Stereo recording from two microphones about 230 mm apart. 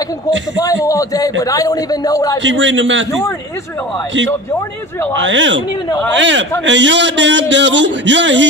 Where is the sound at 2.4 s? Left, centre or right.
Right.